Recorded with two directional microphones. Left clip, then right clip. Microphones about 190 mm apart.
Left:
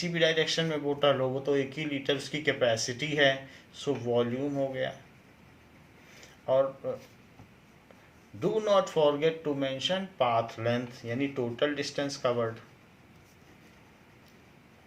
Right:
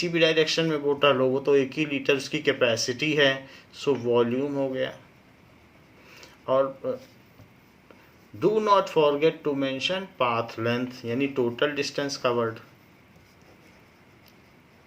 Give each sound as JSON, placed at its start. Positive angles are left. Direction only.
{"t": 0.0, "sound": "speech", "side_deg": -40}
{"t": 6.1, "sound": "a sound", "side_deg": -40}
{"t": 8.4, "sound": "speech", "side_deg": -45}